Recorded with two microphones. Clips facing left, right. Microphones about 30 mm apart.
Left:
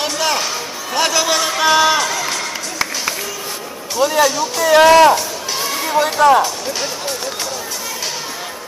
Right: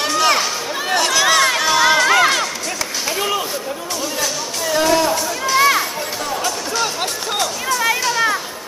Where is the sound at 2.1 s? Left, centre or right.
Right.